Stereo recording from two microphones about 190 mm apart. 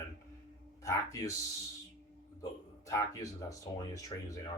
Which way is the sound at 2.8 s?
15° left (ahead or behind).